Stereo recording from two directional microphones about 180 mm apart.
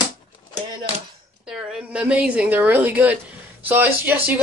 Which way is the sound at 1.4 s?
5° right (ahead or behind).